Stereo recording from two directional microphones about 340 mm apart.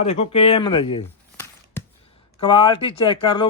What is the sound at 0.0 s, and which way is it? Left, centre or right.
Speech, centre.